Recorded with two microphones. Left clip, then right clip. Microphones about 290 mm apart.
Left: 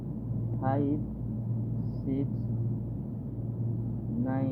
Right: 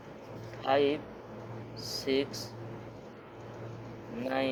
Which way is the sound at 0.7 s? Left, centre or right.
Right.